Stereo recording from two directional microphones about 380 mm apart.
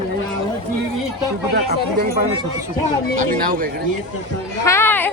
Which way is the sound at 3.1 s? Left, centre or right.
Right.